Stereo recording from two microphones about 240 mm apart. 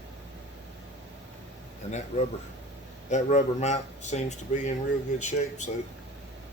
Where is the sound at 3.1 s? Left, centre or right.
Left.